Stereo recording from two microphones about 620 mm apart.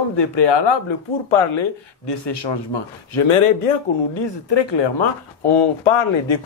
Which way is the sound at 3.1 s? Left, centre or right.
Left.